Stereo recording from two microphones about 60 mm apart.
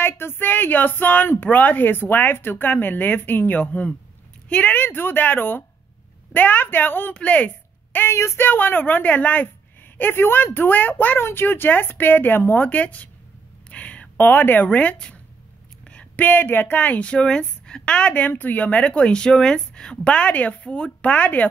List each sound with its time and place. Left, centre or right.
0.0 s speech: left
8.1 s speech: left
8.5 s speech: left
15.8 s a sound: centre
16.2 s speech: left